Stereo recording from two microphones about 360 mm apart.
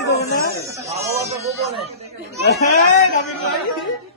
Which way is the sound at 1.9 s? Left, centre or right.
Centre.